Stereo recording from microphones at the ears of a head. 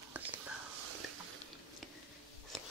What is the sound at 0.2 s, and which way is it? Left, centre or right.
Whispering, right.